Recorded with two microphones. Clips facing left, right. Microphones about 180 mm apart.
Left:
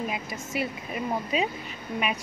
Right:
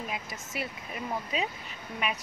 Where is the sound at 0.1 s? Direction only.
10° left (ahead or behind).